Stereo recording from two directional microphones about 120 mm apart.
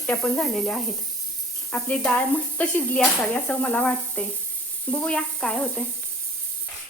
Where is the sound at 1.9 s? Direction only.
10° left (ahead or behind).